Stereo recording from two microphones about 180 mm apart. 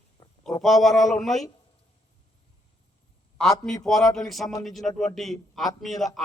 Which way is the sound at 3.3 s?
Centre (ahead or behind).